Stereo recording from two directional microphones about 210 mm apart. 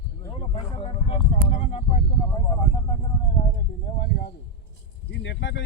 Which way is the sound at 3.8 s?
45° left (ahead or behind).